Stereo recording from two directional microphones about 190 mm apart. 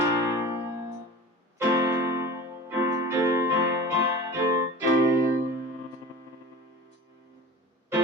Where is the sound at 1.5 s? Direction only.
20° right (ahead or behind).